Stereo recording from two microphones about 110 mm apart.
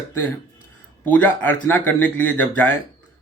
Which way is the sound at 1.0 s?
15° left (ahead or behind).